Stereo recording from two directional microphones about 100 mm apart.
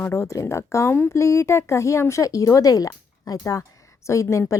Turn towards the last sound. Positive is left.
turn(degrees=30)  # may be behind; listen again after turning